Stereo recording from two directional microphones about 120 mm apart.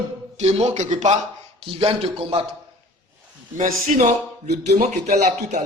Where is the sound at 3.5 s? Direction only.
90° right.